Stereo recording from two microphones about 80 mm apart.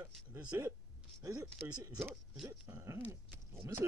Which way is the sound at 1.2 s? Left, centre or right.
Right.